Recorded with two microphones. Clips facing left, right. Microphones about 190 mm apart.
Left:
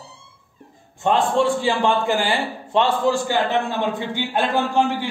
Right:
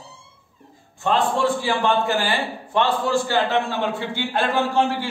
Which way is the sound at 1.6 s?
25° left (ahead or behind).